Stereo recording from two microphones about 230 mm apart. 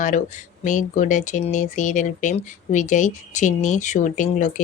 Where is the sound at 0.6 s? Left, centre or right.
Left.